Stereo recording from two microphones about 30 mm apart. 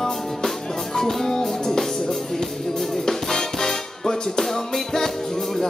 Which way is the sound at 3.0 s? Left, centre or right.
Centre.